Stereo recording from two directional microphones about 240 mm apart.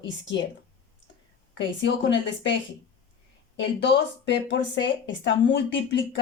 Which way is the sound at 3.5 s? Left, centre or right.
Left.